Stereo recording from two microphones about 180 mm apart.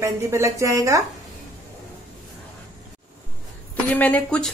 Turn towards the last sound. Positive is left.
turn(degrees=5)  # may be behind; listen again after turning